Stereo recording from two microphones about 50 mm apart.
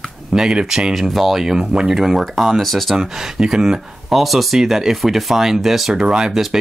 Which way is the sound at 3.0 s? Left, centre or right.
Centre.